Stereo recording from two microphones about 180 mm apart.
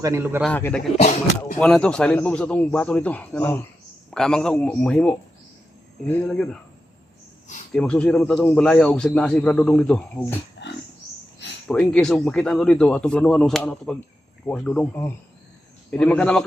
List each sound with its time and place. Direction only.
0.0 s a man's voice: 15° right (ahead or behind)
0.4 s a man's voice: 5° left (ahead or behind)
0.9 s speech: 45° left (ahead or behind)
1.5 s a man's voice: 5° left (ahead or behind)
7.7 s speech: 5° left (ahead or behind)
10.6 s a sound: 75° left (ahead or behind)
11.7 s a man's voice: 5° left (ahead or behind)